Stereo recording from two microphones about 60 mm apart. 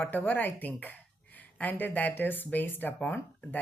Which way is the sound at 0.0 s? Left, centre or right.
Left.